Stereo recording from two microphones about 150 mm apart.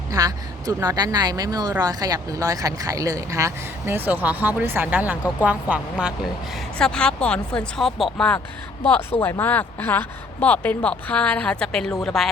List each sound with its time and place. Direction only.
0.1 s speech: 25° right (ahead or behind); by 6.1 s 5° right (ahead or behind)
6.7 s speech: 5° left (ahead or behind)